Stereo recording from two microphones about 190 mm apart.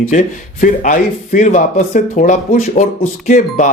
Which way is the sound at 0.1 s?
45° left (ahead or behind).